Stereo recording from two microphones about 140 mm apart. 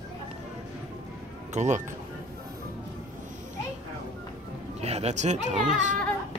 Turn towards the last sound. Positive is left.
turn(degrees=-60)  # may be behind; listen again after turning